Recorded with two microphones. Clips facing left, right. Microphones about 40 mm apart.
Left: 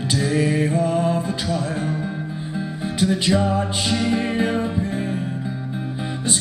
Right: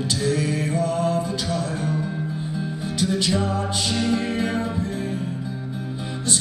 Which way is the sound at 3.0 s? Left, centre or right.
Left.